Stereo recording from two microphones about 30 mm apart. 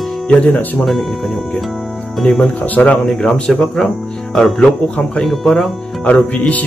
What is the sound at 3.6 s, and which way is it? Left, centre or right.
Speech, centre.